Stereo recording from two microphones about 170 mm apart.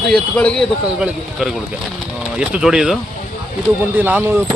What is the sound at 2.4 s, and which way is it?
Speech, 5° right (ahead or behind).